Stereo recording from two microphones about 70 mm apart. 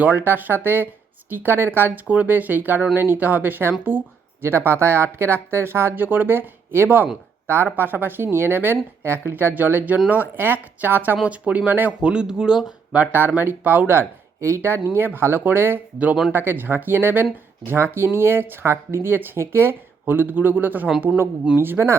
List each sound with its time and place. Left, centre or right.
0.0 s speech: right
11.9 s speech: centre
12.9 s speech: right